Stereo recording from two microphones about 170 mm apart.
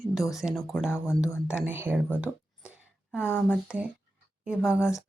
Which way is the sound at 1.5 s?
10° right (ahead or behind).